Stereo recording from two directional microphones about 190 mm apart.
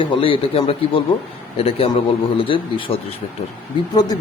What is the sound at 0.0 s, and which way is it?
A man's voice, 30° left (ahead or behind).